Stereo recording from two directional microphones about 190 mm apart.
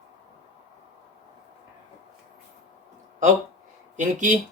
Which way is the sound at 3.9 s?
40° right (ahead or behind).